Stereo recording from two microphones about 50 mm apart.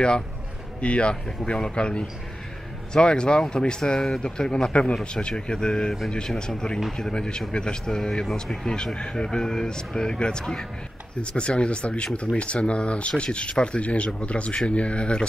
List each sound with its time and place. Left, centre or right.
0.7 s speech: left